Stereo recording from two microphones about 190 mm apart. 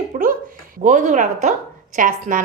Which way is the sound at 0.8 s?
40° right (ahead or behind).